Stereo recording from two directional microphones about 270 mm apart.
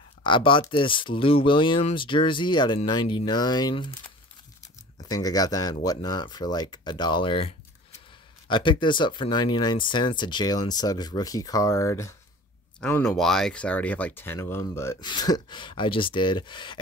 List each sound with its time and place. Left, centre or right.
0.2 s speech: centre
4.9 s speech: centre